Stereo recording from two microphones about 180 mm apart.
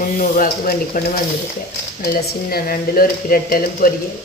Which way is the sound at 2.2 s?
55° left (ahead or behind).